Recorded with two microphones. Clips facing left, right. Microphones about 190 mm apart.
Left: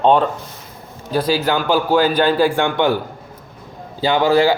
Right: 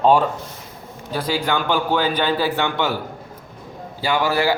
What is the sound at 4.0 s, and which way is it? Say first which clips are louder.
Speech: left 6 dB; 20° left (ahead or behind).